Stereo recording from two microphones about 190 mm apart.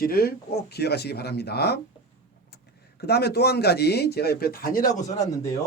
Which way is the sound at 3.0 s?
60° left (ahead or behind).